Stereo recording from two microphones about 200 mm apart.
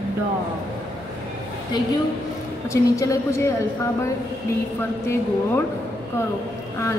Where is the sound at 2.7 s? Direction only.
15° left (ahead or behind).